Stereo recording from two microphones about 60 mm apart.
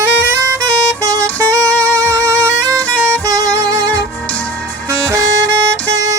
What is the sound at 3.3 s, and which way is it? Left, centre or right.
Music, right.